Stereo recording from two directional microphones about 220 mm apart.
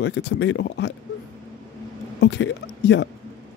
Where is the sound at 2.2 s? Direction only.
55° left (ahead or behind).